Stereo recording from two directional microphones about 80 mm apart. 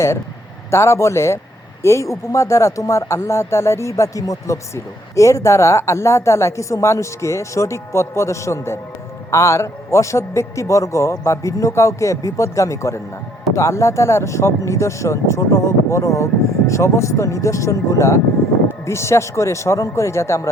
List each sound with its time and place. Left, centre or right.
0.7 s speech: left